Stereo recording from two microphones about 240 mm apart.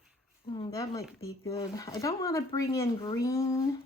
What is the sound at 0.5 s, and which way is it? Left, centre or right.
Speech, centre.